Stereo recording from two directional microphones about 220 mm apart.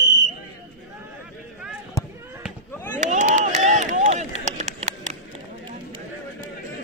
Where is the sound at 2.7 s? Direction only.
10° left (ahead or behind).